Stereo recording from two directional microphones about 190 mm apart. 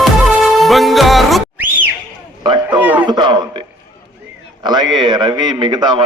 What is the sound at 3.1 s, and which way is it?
A man's voice, 20° right (ahead or behind).